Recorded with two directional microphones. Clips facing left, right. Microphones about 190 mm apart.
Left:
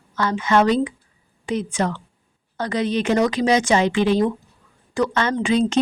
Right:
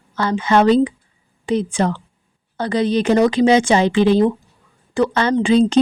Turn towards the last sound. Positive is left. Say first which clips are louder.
# right 5 dB
turn(degrees=-30)  # may be behind; listen again after turning